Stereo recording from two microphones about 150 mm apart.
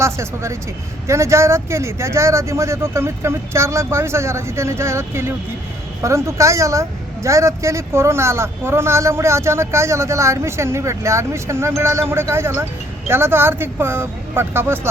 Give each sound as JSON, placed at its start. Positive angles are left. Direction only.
{"t": 0.0, "sound": "speech", "side_deg": -20}